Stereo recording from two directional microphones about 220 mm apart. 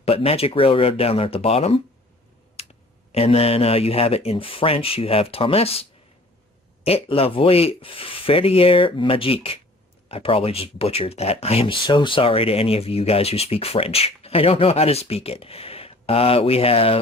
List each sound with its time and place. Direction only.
0.0 s speech: 25° left (ahead or behind)
3.1 s speech: 25° left (ahead or behind)
6.8 s speech: 25° left (ahead or behind)